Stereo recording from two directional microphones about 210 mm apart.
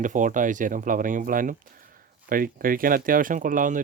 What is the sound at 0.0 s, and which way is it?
Speech, 40° right (ahead or behind).